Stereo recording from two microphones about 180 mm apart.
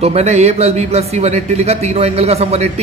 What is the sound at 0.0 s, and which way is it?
A man's voice, 35° right (ahead or behind).